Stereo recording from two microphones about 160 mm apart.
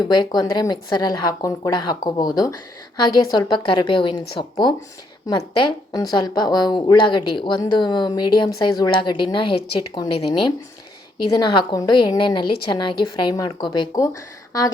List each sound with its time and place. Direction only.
0.0 s speech: 25° left (ahead or behind)
5.9 s speech: 25° left (ahead or behind)
11.3 s speech: 25° left (ahead or behind)